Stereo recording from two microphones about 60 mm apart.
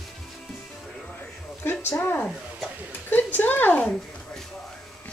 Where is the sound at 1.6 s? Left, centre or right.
Left.